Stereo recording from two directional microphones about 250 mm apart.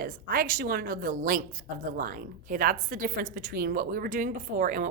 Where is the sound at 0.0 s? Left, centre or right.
Right.